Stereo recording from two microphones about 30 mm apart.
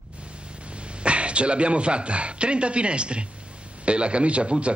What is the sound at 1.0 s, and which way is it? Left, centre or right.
A man's voice, right.